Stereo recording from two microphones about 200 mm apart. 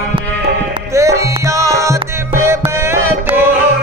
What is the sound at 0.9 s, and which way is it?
Music, 15° right (ahead or behind).